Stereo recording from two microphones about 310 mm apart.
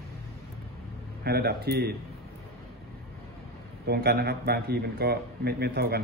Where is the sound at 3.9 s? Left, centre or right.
Right.